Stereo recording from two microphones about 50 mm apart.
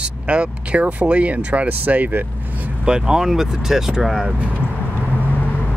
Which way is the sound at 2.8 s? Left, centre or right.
Centre.